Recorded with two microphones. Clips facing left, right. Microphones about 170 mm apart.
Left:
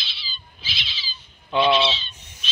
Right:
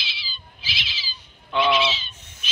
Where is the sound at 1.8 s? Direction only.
10° right (ahead or behind).